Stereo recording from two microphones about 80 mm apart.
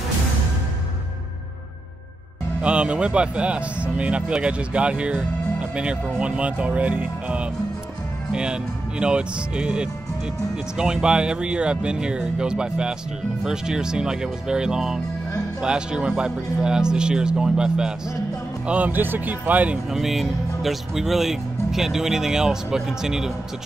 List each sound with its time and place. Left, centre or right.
2.6 s speech: centre
18.7 s speech: right
19.9 s speech: centre